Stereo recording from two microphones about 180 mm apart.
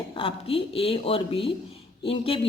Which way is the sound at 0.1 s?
30° left (ahead or behind).